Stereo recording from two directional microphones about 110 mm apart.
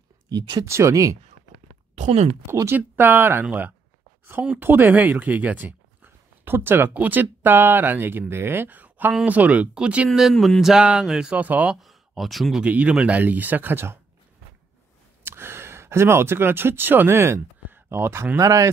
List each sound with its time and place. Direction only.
0.3 s speech: 40° right (ahead or behind)
0.7 s speech: 25° right (ahead or behind)
2.0 s speech: 85° right
2.4 s speech: 25° right (ahead or behind)
10.0 s speech: centre (ahead or behind)
11.8 s speech: centre (ahead or behind)
12.6 s speech: 10° right (ahead or behind)
15.2 s speech: 20° right (ahead or behind)